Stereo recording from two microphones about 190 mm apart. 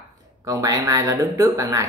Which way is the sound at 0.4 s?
20° right (ahead or behind).